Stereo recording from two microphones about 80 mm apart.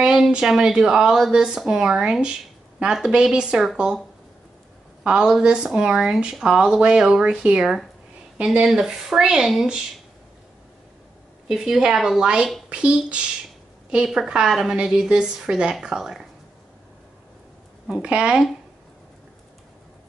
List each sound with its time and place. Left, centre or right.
0.0 s a woman's voice: centre
5.0 s a woman's voice: centre
11.4 s a woman's voice: centre
17.8 s a woman's voice: centre